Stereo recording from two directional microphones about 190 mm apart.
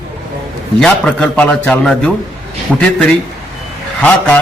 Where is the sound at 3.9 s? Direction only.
5° left (ahead or behind).